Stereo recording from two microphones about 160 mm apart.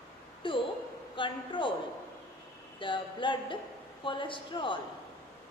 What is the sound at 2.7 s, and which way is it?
A woman's voice, 30° left (ahead or behind).